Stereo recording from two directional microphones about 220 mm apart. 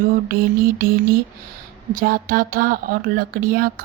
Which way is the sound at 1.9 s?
40° right (ahead or behind).